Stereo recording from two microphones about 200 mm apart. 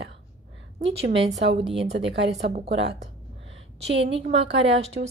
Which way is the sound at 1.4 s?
60° right (ahead or behind).